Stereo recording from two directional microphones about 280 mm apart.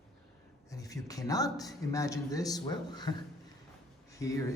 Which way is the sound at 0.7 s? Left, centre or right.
Centre.